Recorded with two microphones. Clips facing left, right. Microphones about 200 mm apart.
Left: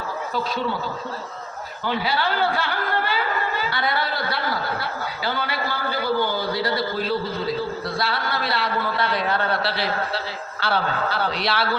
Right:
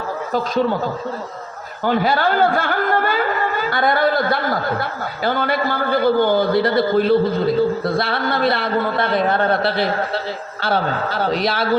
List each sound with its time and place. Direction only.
0.3 s speech: 45° right (ahead or behind)
1.8 s speech: 50° right (ahead or behind)